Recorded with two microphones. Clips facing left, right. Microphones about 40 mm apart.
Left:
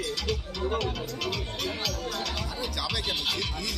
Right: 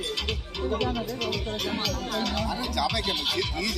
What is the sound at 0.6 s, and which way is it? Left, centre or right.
Speech, centre.